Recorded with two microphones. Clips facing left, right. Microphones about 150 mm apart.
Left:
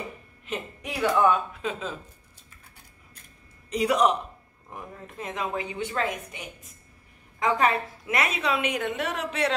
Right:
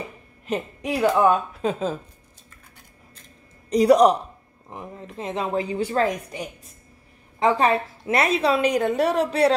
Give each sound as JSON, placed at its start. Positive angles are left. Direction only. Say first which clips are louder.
{"t": 0.5, "sound": "a woman's voice", "louder": "right 8 dB", "side_deg": -35}
{"t": 3.7, "sound": "a woman's voice", "louder": "right 7 dB", "side_deg": -40}
{"t": 4.7, "sound": "a woman's voice", "louder": "right 4 dB", "side_deg": -20}